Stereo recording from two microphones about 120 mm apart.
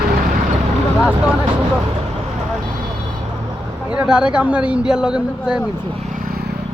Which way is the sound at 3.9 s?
10° right (ahead or behind).